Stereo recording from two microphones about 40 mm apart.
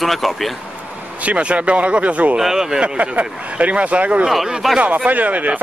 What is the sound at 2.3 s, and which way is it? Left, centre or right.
Speech, centre.